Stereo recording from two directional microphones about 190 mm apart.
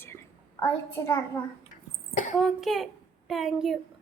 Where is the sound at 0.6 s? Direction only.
15° left (ahead or behind).